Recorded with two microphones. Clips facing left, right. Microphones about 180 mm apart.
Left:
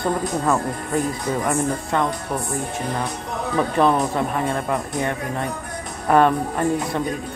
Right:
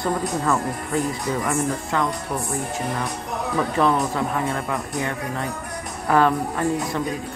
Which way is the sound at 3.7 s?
20° left (ahead or behind).